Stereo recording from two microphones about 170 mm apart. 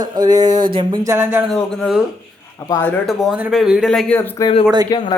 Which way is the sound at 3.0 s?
Centre (ahead or behind).